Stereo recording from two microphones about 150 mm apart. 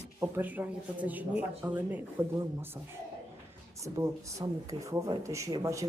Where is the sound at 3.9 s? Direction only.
20° right (ahead or behind).